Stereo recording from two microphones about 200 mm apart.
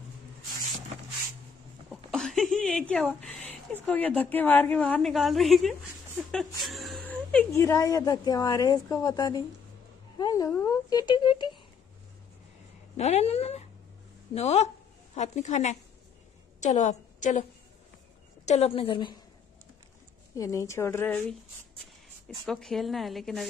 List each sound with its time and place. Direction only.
2.0 s a sound: centre (ahead or behind)
3.7 s a woman's voice: 5° left (ahead or behind); by 11.5 s 25° left (ahead or behind)
12.9 s a woman's voice: 30° left (ahead or behind)
20.3 s a woman's voice: 15° left (ahead or behind)
22.5 s a woman's voice: centre (ahead or behind)